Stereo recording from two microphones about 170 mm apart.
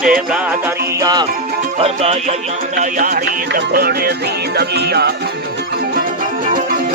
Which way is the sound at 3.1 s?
65° right (ahead or behind).